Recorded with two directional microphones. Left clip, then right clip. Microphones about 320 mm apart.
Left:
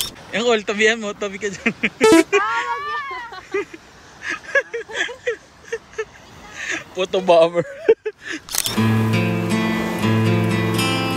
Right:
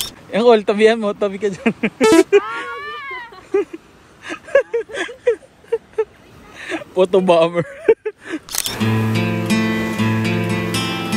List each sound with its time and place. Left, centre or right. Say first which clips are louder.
0.3 s speech: right 6 dB; centre
2.0 s music: right 1 dB; centre
2.3 s speech: right 2 dB; centre
3.0 s a sound: left 1 dB; centre
3.5 s a sound: right 6 dB; centre
8.5 s music: left 1 dB; centre